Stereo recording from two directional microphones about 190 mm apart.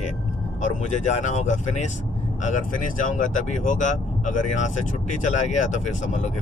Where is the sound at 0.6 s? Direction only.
40° left (ahead or behind).